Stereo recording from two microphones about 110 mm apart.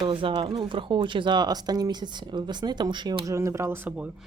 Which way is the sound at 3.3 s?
25° right (ahead or behind).